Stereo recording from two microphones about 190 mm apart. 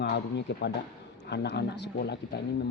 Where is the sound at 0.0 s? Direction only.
65° left (ahead or behind).